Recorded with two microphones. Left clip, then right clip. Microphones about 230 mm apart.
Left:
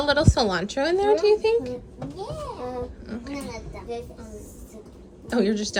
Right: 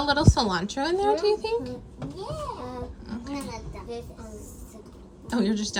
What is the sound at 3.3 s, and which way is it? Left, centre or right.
Speech, right.